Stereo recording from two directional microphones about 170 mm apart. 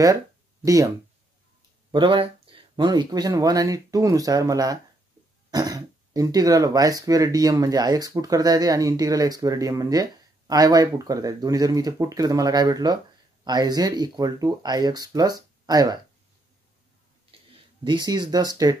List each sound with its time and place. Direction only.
0.7 s speech: 20° right (ahead or behind)
17.3 s a sound: 30° right (ahead or behind)
17.8 s speech: 25° right (ahead or behind)